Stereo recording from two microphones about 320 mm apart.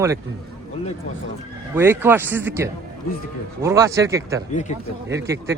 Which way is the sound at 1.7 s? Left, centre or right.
Centre.